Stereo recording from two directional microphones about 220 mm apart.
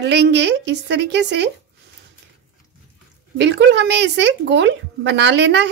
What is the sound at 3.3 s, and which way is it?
Speech, 50° right (ahead or behind).